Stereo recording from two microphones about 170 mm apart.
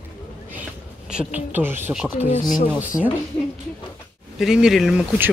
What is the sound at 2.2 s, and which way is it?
Speech, 45° left (ahead or behind).